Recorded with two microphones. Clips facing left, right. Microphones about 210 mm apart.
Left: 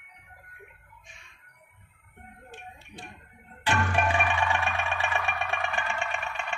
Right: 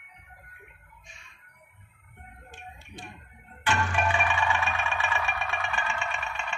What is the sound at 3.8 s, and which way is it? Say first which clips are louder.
Music: left 1 dB; 55° left (ahead or behind).